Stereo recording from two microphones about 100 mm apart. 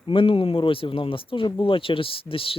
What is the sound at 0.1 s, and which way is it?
Speech, 60° left (ahead or behind).